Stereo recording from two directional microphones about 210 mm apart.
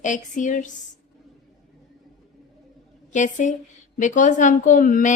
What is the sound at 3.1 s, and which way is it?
A woman's voice, 35° left (ahead or behind).